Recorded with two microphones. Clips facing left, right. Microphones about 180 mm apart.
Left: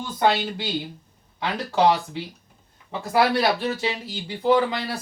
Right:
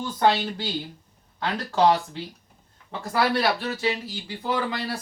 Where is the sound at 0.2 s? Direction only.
15° left (ahead or behind).